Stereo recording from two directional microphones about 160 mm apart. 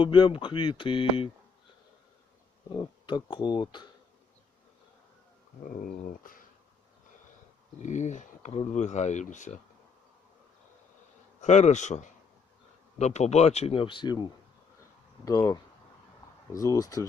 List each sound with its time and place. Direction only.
0.0 s speech: 35° left (ahead or behind)
2.6 s speech: 30° left (ahead or behind)
5.6 s speech: 60° left (ahead or behind)
7.8 s speech: 50° left (ahead or behind)
11.3 s speech: 45° left (ahead or behind); by 17.1 s 20° left (ahead or behind)